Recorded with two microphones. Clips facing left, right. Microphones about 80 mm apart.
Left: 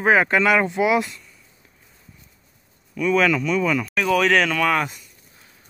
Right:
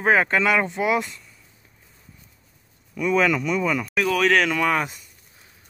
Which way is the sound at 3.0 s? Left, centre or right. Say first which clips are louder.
Left 1 dB; centre.